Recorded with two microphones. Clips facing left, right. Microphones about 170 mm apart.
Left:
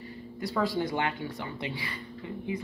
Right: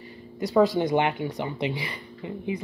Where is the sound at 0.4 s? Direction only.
20° right (ahead or behind).